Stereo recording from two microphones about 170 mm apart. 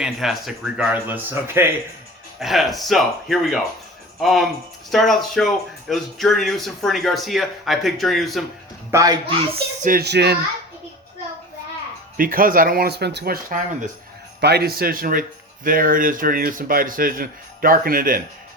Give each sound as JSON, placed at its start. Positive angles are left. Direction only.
{"t": 0.0, "sound": "speech", "side_deg": 0}
{"t": 2.4, "sound": "speech", "side_deg": 0}
{"t": 8.9, "sound": "speech", "side_deg": -20}
{"t": 9.8, "sound": "speech", "side_deg": -65}
{"t": 12.1, "sound": "speech", "side_deg": -55}
{"t": 14.4, "sound": "speech", "side_deg": -70}